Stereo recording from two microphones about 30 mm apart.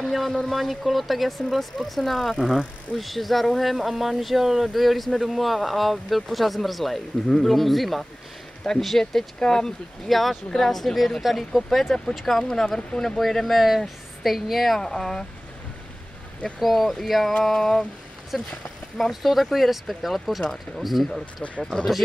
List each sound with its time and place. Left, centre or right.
0.1 s speech: centre
8.6 s speech: centre
10.0 s speech: centre
12.4 s speech: left
13.2 s speech: centre
14.8 s speech: centre
16.5 s speech: centre
18.3 s speech: centre